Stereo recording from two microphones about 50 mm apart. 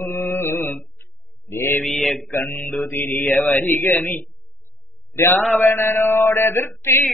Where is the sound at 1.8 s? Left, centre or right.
Centre.